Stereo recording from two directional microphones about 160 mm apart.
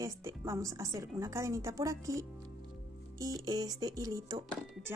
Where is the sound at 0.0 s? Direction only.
20° right (ahead or behind).